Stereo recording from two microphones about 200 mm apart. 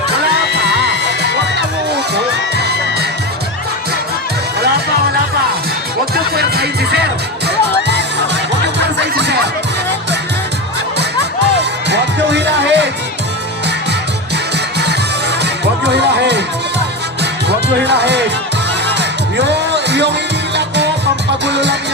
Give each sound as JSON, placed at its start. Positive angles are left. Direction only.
{"t": 2.1, "sound": "children shouting", "side_deg": -55}
{"t": 6.3, "sound": "music", "side_deg": -55}
{"t": 11.5, "sound": "music", "side_deg": -60}
{"t": 15.4, "sound": "music", "side_deg": -60}
{"t": 17.8, "sound": "speech", "side_deg": -60}
{"t": 18.9, "sound": "music", "side_deg": -60}